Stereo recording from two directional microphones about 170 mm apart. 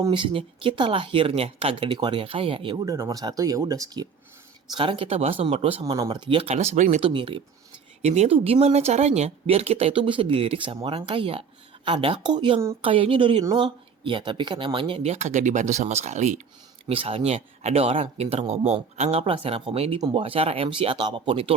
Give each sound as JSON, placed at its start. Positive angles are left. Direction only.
{"t": 0.0, "sound": "speech", "side_deg": -30}
{"t": 8.0, "sound": "speech", "side_deg": -40}
{"t": 16.9, "sound": "speech", "side_deg": -30}